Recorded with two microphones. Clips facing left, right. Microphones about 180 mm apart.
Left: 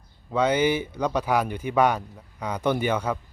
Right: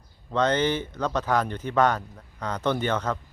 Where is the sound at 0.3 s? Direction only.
10° left (ahead or behind).